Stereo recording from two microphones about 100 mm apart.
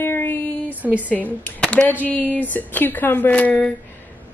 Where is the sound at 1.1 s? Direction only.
15° left (ahead or behind).